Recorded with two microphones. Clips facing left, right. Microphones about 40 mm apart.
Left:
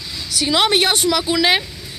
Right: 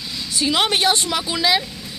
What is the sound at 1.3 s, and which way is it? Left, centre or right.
Speech, left.